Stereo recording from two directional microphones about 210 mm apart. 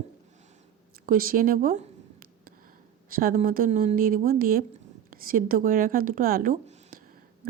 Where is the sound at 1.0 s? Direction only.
40° right (ahead or behind).